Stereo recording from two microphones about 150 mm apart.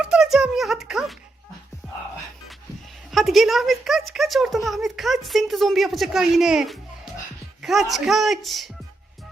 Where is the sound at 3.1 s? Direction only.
Centre (ahead or behind).